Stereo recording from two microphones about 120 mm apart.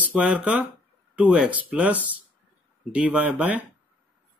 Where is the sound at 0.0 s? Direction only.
10° right (ahead or behind).